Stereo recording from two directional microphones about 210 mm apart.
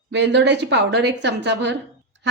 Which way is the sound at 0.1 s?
55° right (ahead or behind).